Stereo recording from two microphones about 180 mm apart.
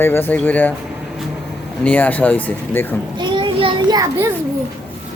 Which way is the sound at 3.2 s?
25° right (ahead or behind).